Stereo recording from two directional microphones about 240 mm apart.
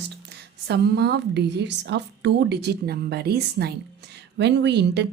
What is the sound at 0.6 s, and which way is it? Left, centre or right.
Speech, right.